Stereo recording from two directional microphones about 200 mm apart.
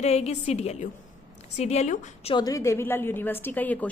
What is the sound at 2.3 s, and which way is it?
A woman's voice, 20° left (ahead or behind).